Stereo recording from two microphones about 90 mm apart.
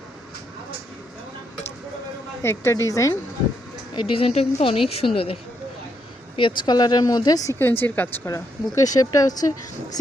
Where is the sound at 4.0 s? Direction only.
75° left (ahead or behind).